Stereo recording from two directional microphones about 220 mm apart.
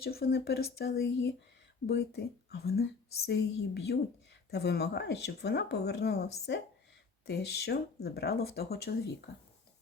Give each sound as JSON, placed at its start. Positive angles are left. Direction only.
{"t": 0.0, "sound": "speech", "side_deg": 45}